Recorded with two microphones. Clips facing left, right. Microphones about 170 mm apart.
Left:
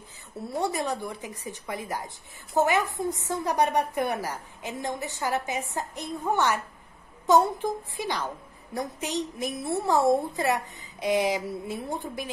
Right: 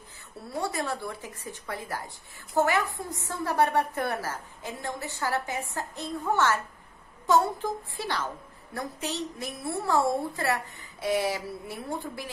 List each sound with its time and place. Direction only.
0.6 s a woman's voice: 20° left (ahead or behind)